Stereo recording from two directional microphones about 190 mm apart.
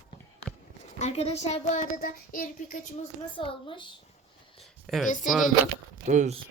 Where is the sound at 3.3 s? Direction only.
25° left (ahead or behind).